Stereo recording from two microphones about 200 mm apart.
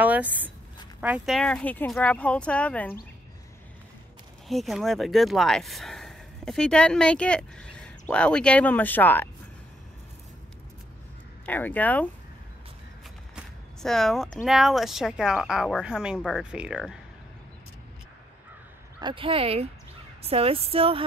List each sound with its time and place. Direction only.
0.0 s speech: 10° right (ahead or behind)
4.5 s speech: centre (ahead or behind)
11.4 s speech: 10° left (ahead or behind)
13.8 s speech: centre (ahead or behind)
18.9 s speech: 25° right (ahead or behind)